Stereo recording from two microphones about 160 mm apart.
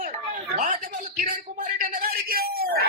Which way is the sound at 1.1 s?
60° right (ahead or behind).